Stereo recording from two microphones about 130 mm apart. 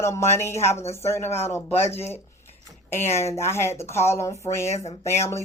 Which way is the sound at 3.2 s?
20° left (ahead or behind).